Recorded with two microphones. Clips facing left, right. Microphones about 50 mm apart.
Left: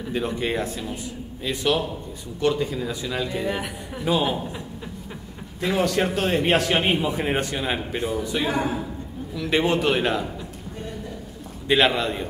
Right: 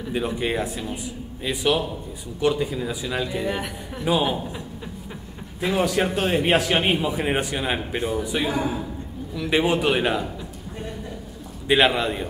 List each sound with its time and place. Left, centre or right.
0.1 s a man's voice: centre
5.6 s a man's voice: centre
8.5 s a man's voice: left
9.3 s a man's voice: centre
11.6 s a man's voice: centre